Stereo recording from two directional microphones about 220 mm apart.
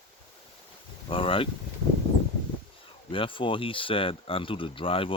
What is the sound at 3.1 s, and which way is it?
Speech, 25° left (ahead or behind).